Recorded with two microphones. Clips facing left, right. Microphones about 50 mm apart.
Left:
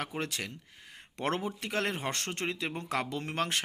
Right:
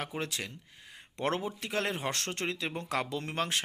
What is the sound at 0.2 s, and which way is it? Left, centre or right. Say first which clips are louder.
Speech: left 1 dB; left.